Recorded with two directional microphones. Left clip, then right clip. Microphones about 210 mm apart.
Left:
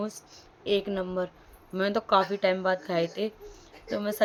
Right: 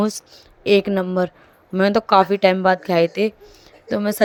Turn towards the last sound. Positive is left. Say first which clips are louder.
# right 9 dB
turn(degrees=-40)  # may be behind; listen again after turning